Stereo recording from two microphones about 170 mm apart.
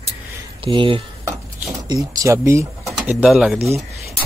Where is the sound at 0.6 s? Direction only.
30° right (ahead or behind); by 3.6 s 5° right (ahead or behind).